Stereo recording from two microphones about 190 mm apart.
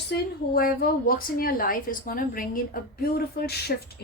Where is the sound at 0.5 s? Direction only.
50° left (ahead or behind).